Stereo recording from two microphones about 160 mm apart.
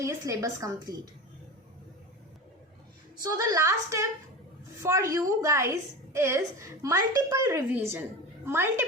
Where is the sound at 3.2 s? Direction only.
20° right (ahead or behind).